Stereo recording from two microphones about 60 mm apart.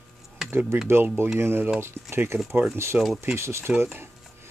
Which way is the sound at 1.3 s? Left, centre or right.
Right.